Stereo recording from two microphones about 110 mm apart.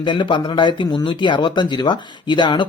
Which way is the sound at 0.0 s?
45° left (ahead or behind).